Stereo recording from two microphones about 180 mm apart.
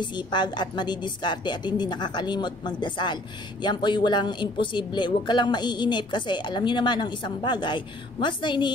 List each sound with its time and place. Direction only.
0.0 s speech: 25° left (ahead or behind)